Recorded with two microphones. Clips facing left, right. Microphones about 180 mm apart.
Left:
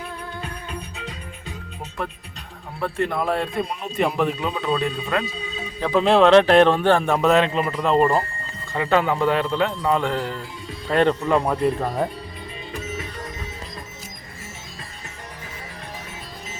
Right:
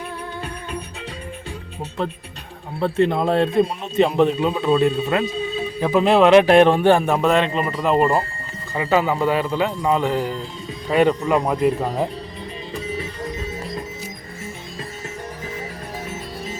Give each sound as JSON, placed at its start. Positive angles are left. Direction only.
{"t": 2.7, "sound": "speech", "side_deg": -20}
{"t": 5.8, "sound": "a man's voice", "side_deg": -5}